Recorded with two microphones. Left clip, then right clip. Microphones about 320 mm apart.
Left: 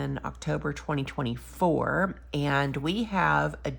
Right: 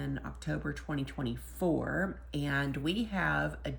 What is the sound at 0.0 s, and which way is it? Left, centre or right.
Speech, centre.